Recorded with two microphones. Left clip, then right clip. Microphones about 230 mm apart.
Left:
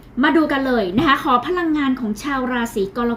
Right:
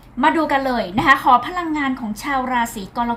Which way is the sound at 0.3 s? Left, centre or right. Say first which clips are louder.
Left 1 dB; right.